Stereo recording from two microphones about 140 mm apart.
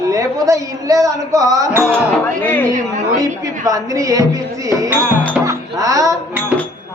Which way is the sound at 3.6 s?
25° right (ahead or behind).